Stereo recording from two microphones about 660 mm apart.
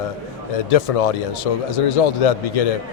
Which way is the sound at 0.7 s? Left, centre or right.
Left.